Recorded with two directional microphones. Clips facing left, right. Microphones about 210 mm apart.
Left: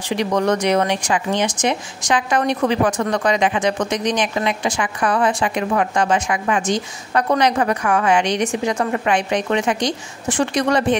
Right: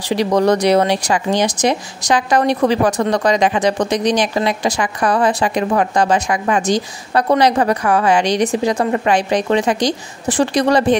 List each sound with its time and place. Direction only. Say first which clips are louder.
0.1 s speech: right 4 dB; 35° right (ahead or behind)